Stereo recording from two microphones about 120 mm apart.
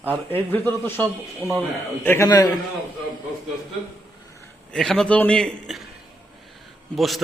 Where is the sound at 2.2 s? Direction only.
30° left (ahead or behind).